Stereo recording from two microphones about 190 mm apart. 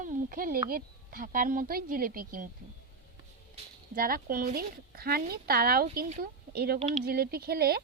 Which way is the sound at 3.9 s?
50° right (ahead or behind).